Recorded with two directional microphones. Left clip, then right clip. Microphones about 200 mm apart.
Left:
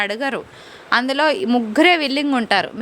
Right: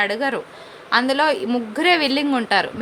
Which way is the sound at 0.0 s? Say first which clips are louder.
Right 1 dB; 35° left (ahead or behind).